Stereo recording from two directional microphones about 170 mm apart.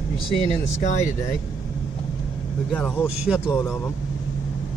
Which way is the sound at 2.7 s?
10° left (ahead or behind).